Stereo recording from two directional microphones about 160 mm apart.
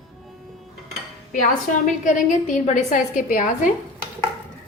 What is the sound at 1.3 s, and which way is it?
A woman's voice, 55° left (ahead or behind).